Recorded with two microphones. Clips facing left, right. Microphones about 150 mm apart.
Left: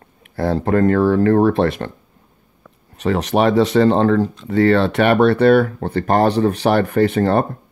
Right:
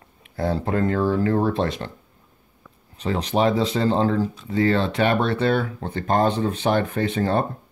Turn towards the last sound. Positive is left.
turn(degrees=60)  # may be behind; listen again after turning